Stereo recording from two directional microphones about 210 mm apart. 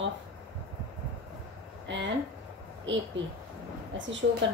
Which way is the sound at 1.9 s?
60° right (ahead or behind).